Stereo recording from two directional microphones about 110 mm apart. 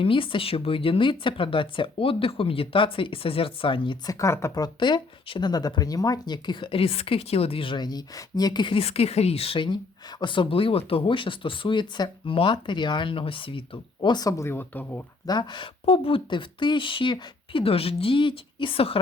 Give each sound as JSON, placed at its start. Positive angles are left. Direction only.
{"t": 0.0, "sound": "speech", "side_deg": 50}
{"t": 4.0, "sound": "speech", "side_deg": 30}
{"t": 4.6, "sound": "speech", "side_deg": 45}
{"t": 8.8, "sound": "speech", "side_deg": 70}
{"t": 15.3, "sound": "speech", "side_deg": 40}